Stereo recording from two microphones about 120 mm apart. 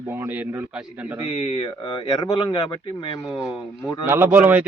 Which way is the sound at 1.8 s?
35° left (ahead or behind).